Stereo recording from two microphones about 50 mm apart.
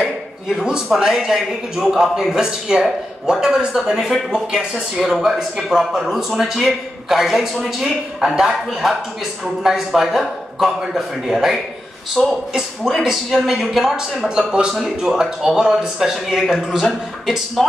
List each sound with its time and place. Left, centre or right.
0.7 s a man's voice: centre
12.2 s speech: centre
13.3 s a man's voice: centre
17.6 s speech: centre